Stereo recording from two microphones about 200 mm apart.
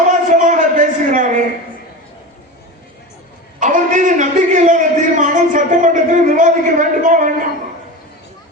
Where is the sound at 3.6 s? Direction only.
40° right (ahead or behind).